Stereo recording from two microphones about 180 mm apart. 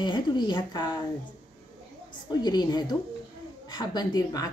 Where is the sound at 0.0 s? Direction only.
25° left (ahead or behind).